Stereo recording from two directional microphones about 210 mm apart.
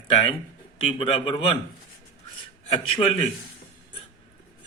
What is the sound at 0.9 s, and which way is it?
Speech, 25° left (ahead or behind).